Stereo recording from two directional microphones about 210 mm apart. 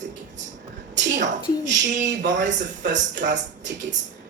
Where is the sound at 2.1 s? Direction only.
60° right (ahead or behind).